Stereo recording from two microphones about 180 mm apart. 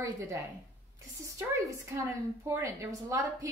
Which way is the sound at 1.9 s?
15° right (ahead or behind).